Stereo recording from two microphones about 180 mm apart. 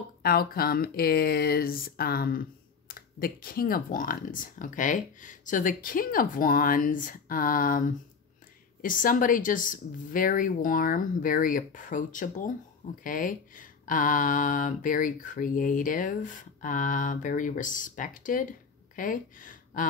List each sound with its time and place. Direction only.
0.2 s speech: 55° left (ahead or behind)